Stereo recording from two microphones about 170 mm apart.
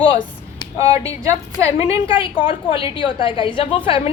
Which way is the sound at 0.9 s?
20° right (ahead or behind).